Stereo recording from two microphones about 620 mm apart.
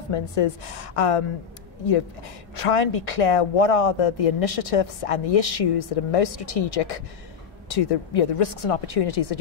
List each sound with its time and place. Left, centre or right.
0.1 s speech: left
2.5 s speech: left